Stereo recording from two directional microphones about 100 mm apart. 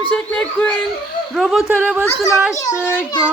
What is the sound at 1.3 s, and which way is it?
Speech, centre (ahead or behind).